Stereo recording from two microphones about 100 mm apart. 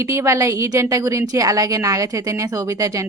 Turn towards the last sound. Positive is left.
turn(degrees=-30)  # may be behind; listen again after turning